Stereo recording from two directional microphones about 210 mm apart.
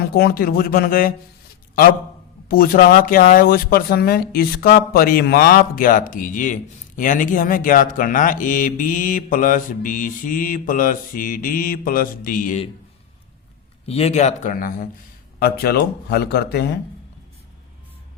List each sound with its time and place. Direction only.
0.1 s speech: 45° left (ahead or behind)
2.5 s speech: 45° left (ahead or behind)
13.8 s speech: 30° left (ahead or behind); by 16.7 s 50° left (ahead or behind)